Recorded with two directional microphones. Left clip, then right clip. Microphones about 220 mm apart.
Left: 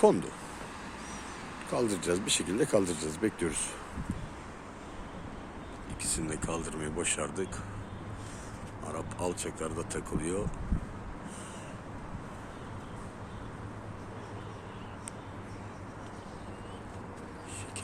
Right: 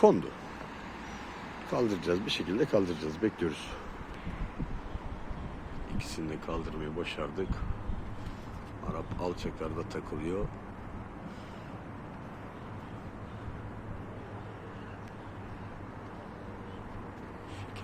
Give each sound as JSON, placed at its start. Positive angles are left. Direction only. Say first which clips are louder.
{"t": 0.0, "sound": "speech", "louder": "right 1 dB", "side_deg": 0}
{"t": 1.7, "sound": "speech", "louder": "even", "side_deg": 0}
{"t": 6.0, "sound": "speech", "louder": "left 3 dB", "side_deg": 0}
{"t": 8.9, "sound": "speech", "louder": "left 1 dB", "side_deg": 5}